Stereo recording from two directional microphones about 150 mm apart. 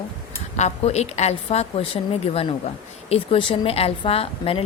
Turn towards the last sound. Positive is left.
turn(degrees=40)  # may be behind; listen again after turning